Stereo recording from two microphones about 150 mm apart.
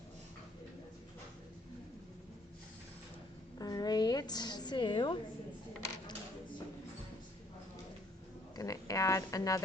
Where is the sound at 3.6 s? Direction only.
25° left (ahead or behind).